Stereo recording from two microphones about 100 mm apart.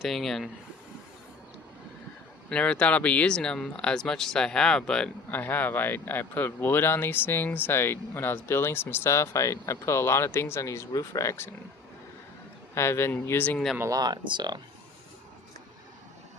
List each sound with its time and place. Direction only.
0.0 s speech: centre (ahead or behind)
2.5 s speech: 10° left (ahead or behind)
5.3 s speech: 20° left (ahead or behind)
12.7 s speech: 25° left (ahead or behind)
13.9 s speech: 45° right (ahead or behind)